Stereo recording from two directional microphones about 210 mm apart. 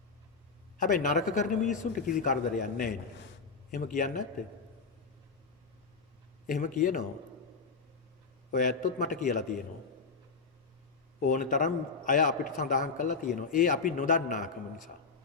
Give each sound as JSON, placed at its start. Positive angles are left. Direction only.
{"t": 0.8, "sound": "a man's voice", "side_deg": 40}
{"t": 6.5, "sound": "a man's voice", "side_deg": 40}
{"t": 8.5, "sound": "a man's voice", "side_deg": 35}
{"t": 11.3, "sound": "a man's voice", "side_deg": 40}